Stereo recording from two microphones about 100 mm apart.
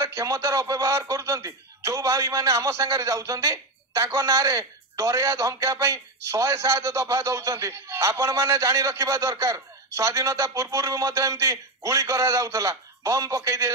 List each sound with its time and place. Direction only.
0.0 s speech: 30° right (ahead or behind)